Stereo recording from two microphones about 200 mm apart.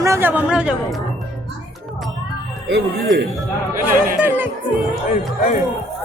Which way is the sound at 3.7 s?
10° right (ahead or behind).